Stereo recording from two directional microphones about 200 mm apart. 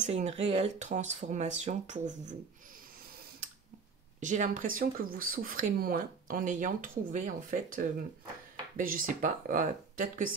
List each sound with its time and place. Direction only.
0.0 s speech: 30° right (ahead or behind)
4.2 s speech: 40° right (ahead or behind)